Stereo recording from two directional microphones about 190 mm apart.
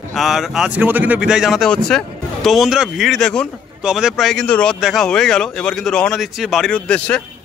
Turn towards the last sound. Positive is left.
turn(degrees=5)  # may be behind; listen again after turning